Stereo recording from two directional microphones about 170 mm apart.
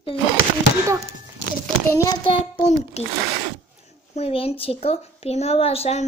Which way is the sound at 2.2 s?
40° left (ahead or behind).